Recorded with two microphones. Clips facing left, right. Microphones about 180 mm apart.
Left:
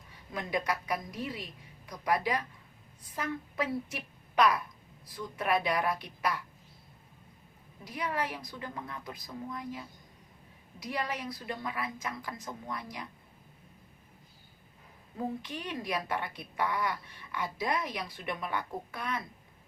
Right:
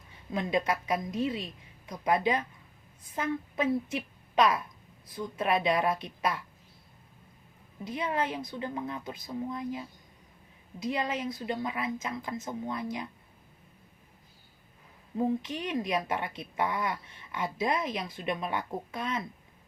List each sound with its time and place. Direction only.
0.3 s a woman's voice: 25° right (ahead or behind)
7.9 s a woman's voice: 25° right (ahead or behind)
15.2 s a woman's voice: 20° right (ahead or behind)